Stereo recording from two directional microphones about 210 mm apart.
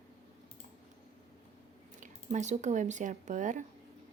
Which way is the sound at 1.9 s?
35° right (ahead or behind).